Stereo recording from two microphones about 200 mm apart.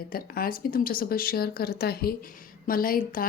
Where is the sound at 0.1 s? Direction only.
45° left (ahead or behind).